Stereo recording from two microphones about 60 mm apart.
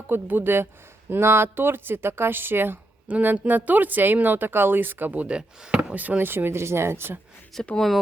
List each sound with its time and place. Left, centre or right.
0.1 s speech: right
3.1 s speech: right
5.4 s speech: centre
5.9 s speech: right
7.5 s speech: centre